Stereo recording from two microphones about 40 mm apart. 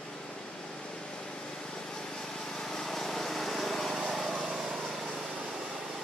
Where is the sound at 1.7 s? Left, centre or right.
Centre.